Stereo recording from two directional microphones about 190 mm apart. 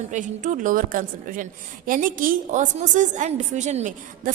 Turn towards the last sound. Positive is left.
turn(degrees=-40)  # may be behind; listen again after turning